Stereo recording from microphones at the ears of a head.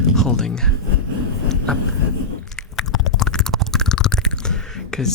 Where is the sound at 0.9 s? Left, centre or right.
Left.